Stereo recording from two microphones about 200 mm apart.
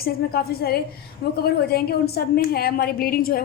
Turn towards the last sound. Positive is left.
turn(degrees=45)  # may be behind; listen again after turning